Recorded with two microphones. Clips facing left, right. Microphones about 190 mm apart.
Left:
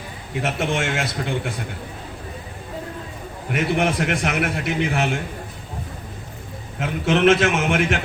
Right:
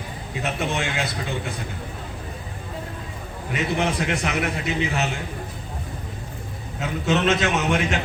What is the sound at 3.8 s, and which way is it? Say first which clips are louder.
Speech: left 2 dB; 55° left (ahead or behind).